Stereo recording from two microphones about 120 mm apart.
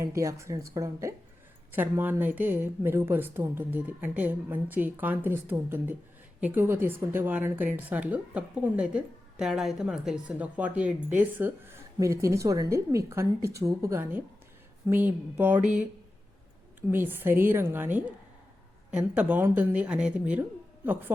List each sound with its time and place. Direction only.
0.0 s speech: 25° right (ahead or behind)
1.7 s a woman's voice: 15° right (ahead or behind)
16.9 s a woman's voice: 15° right (ahead or behind)